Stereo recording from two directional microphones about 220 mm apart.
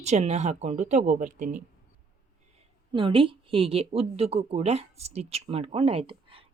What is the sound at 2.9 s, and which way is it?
A woman's voice, 25° right (ahead or behind).